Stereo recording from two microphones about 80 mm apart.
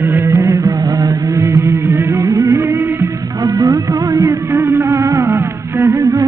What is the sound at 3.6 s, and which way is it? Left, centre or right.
Music of bollywood, right.